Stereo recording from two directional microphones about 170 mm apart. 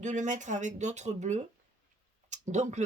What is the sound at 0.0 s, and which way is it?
Speech, 45° right (ahead or behind).